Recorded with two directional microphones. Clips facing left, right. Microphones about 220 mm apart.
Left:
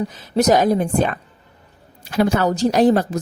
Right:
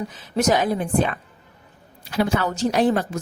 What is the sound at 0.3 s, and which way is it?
Speech, 40° left (ahead or behind).